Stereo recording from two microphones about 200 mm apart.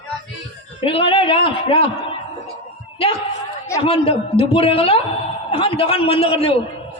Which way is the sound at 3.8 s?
30° left (ahead or behind).